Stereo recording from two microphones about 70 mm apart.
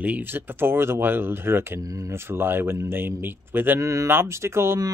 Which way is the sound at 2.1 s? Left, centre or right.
Right.